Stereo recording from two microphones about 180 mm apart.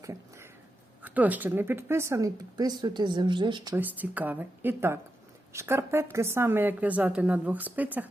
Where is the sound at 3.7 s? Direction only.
10° right (ahead or behind).